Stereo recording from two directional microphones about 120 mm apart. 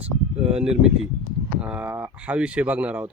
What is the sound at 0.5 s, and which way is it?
A man's voice, 5° right (ahead or behind).